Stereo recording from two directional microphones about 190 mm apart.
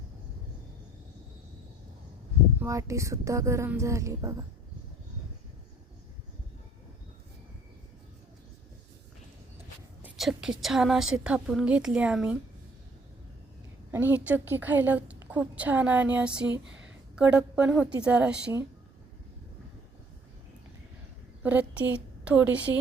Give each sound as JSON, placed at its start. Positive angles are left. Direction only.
{"t": 2.6, "sound": "a woman's voice", "side_deg": -15}
{"t": 10.0, "sound": "a woman's voice", "side_deg": 0}
{"t": 13.9, "sound": "a woman's voice", "side_deg": -10}
{"t": 21.4, "sound": "a woman's voice", "side_deg": -10}